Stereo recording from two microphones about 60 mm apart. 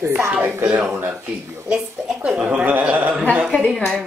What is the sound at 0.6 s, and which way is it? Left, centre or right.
Speech, right.